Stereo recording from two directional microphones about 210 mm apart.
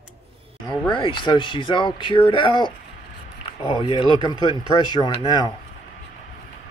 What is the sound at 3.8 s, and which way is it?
Speech, 20° left (ahead or behind).